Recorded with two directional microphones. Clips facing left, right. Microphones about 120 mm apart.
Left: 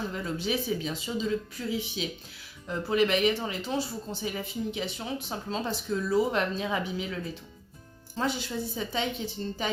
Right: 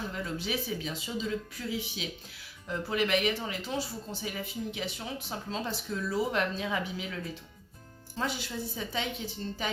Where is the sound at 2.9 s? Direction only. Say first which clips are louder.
Left 4 dB; 30° left (ahead or behind).